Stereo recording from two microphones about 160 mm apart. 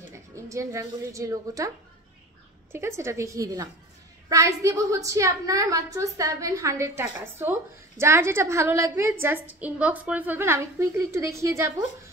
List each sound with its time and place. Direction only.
0.1 s a woman's voice: 20° right (ahead or behind)
2.7 s a woman's voice: 15° right (ahead or behind)